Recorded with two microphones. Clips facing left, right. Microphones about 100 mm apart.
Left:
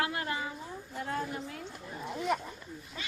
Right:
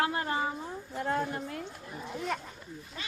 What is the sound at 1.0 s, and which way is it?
Speech, 45° right (ahead or behind).